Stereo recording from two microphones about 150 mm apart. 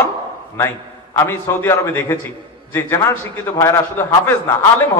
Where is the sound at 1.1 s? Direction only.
15° left (ahead or behind).